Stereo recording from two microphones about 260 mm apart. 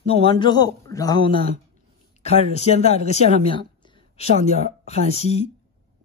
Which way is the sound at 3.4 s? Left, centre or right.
Centre.